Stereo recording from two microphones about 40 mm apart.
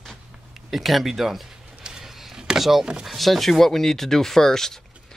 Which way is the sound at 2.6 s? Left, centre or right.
Centre.